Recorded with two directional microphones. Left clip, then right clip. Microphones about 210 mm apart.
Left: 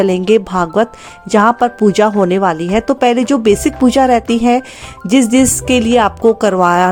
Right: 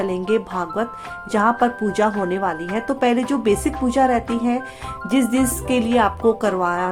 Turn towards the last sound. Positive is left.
turn(degrees=45)  # may be behind; listen again after turning